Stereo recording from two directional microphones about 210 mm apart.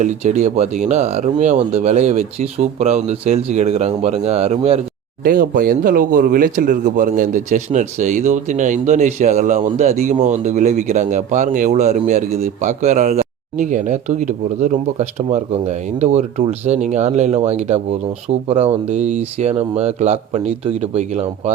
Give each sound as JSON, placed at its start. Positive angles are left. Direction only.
{"t": 0.0, "sound": "speech", "side_deg": -35}
{"t": 5.2, "sound": "speech", "side_deg": -40}